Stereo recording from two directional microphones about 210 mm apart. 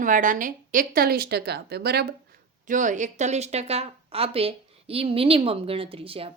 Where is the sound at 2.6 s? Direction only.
35° right (ahead or behind).